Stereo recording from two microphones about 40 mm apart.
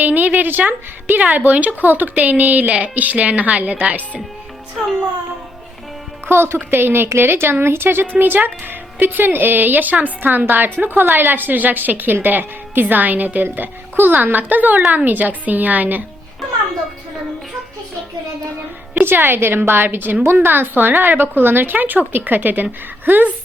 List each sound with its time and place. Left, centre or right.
0.0 s a woman's voice: right
1.2 s speech: right
2.6 s speech: right
2.9 s speech: right
4.8 s a child's voice: centre
6.2 s a woman's voice: right
6.7 s a woman's voice: right
8.1 s speech: right
19.0 s a woman's voice: right
20.2 s a woman's voice: right